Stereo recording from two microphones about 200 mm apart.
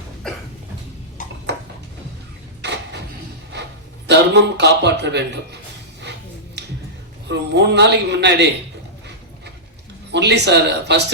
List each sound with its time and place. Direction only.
0.2 s a sound: 5° left (ahead or behind)
2.6 s vehicle: 60° right (ahead or behind)
4.0 s speech: 60° right (ahead or behind)
6.6 s a sound: 55° right (ahead or behind)
7.3 s speech: 60° right (ahead or behind)
10.1 s speech: 60° right (ahead or behind)